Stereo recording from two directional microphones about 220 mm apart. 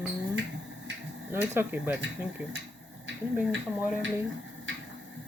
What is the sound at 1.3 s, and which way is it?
Speech, 10° right (ahead or behind).